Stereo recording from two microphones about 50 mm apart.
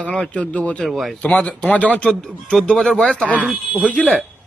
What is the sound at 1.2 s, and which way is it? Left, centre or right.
A man's voice, left.